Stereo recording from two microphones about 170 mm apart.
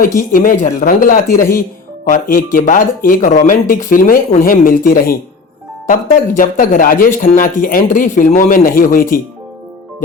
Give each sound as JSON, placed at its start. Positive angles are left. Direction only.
{"t": 0.2, "sound": "speech", "side_deg": 55}